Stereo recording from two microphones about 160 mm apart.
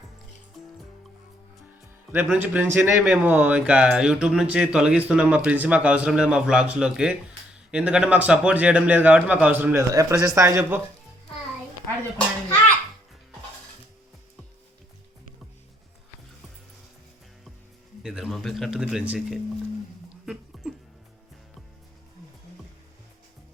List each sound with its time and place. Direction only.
2.1 s speech: 10° right (ahead or behind)
18.0 s speech: 5° right (ahead or behind)
20.2 s a sound: 5° right (ahead or behind)